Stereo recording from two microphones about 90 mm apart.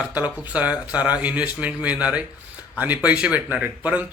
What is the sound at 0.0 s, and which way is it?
Speech, 20° right (ahead or behind).